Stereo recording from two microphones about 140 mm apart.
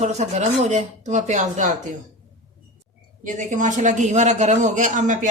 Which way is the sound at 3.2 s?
65° right (ahead or behind).